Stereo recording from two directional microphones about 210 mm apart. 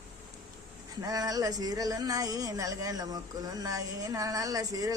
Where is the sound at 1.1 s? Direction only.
15° right (ahead or behind).